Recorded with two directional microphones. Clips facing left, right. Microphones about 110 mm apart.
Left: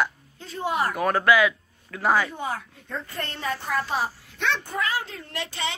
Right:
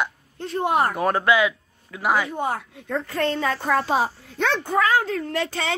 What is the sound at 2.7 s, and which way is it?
Speech, 85° right.